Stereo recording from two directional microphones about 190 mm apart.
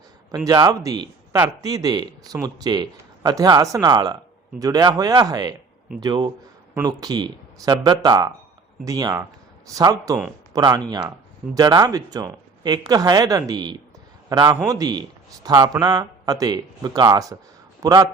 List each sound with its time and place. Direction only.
0.3 s a man's voice: 20° right (ahead or behind)